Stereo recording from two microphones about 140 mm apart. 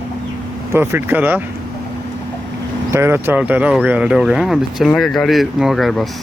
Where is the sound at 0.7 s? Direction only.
15° right (ahead or behind).